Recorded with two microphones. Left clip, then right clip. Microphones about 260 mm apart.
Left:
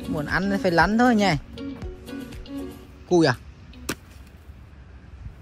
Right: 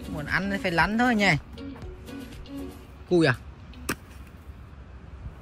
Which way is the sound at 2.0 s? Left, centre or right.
Left.